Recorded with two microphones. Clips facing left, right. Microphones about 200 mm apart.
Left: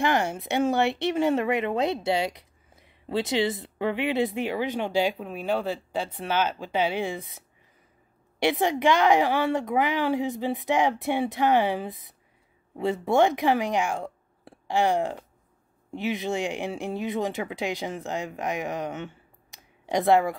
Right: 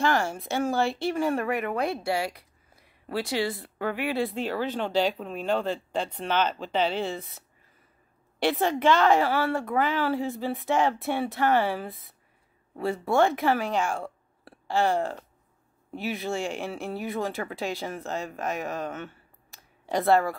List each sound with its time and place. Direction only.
0.0 s speech: 20° left (ahead or behind)